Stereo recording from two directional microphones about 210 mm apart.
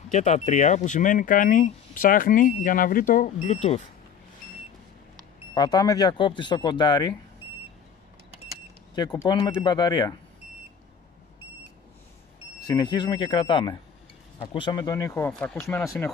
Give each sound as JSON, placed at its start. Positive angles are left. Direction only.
{"t": 0.1, "sound": "speech", "side_deg": 35}
{"t": 5.5, "sound": "speech", "side_deg": 20}
{"t": 8.9, "sound": "speech", "side_deg": 15}
{"t": 12.6, "sound": "speech", "side_deg": 20}